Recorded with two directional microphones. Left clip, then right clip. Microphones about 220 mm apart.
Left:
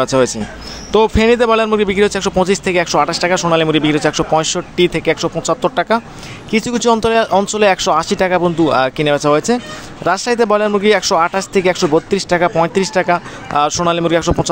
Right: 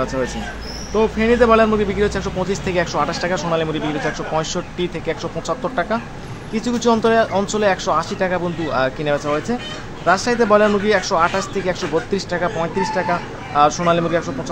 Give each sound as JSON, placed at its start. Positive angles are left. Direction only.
{"t": 0.0, "sound": "speech", "side_deg": 40}